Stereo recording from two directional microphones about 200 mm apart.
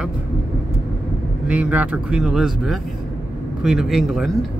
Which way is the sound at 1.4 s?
5° right (ahead or behind).